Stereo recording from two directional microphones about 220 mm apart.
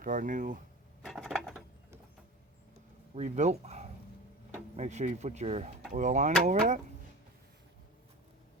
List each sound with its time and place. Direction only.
0.0 s speech: 35° right (ahead or behind)
1.0 s a sound: centre (ahead or behind)
3.2 s speech: 30° right (ahead or behind)